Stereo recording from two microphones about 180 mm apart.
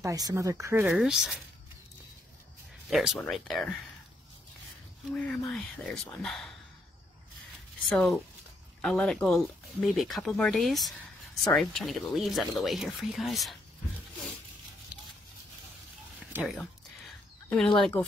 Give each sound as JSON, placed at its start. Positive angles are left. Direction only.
{"t": 0.0, "sound": "speech", "side_deg": -20}
{"t": 0.8, "sound": "speech", "side_deg": -5}
{"t": 2.9, "sound": "speech", "side_deg": -5}
{"t": 5.1, "sound": "speech", "side_deg": 5}
{"t": 7.9, "sound": "speech", "side_deg": 5}
{"t": 17.7, "sound": "speech", "side_deg": 5}